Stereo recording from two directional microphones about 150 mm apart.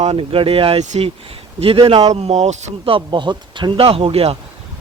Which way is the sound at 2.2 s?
45° right (ahead or behind).